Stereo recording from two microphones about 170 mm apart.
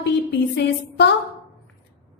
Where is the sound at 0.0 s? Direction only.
90° left.